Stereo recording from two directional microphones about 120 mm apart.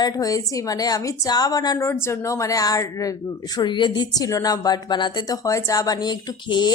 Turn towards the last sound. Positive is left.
turn(degrees=35)  # may be behind; listen again after turning